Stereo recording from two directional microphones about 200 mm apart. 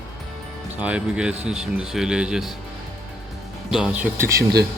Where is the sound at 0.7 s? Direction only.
5° right (ahead or behind).